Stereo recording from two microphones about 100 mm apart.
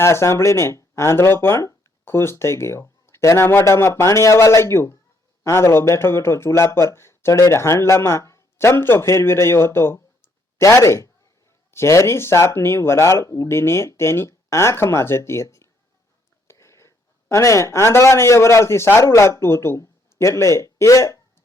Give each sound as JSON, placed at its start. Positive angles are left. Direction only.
{"t": 0.0, "sound": "a man's voice", "side_deg": 25}